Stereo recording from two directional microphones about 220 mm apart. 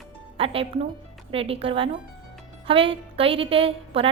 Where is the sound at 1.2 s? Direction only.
25° right (ahead or behind).